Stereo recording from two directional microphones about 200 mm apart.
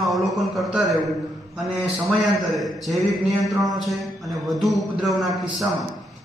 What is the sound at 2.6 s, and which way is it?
A man's voice, centre (ahead or behind).